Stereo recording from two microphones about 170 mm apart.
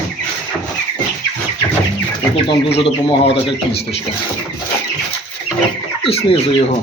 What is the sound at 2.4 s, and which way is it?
Speech, 30° left (ahead or behind).